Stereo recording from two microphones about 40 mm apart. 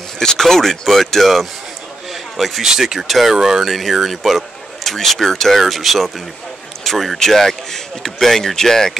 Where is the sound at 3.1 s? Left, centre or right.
Centre.